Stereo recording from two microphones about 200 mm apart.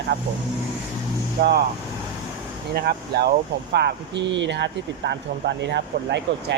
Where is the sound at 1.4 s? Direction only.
55° right (ahead or behind).